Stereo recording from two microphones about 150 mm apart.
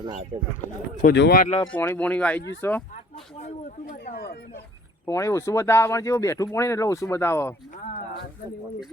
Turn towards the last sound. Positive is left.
turn(degrees=60)  # may be behind; listen again after turning